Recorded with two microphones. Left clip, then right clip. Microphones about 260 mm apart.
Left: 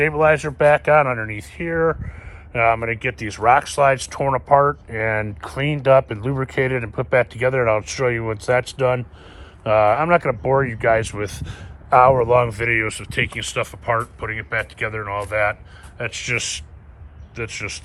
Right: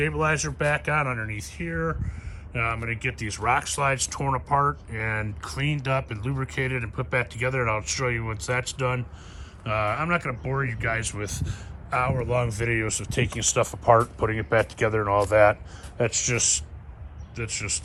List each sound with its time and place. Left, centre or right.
0.0 s speech: centre